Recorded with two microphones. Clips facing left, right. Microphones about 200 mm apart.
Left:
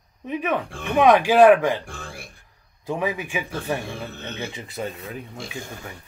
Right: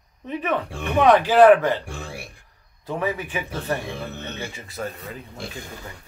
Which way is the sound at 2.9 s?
15° left (ahead or behind).